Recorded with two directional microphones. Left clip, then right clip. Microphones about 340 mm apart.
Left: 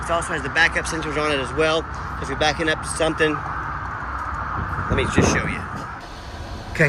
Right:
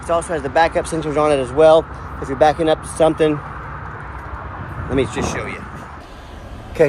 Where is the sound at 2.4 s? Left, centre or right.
Right.